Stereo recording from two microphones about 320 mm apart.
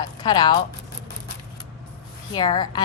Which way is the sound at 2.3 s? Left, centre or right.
Centre.